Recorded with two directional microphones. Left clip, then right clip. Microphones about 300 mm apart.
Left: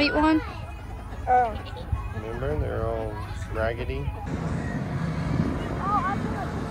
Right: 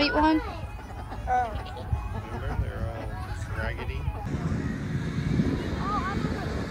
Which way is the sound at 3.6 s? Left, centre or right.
Centre.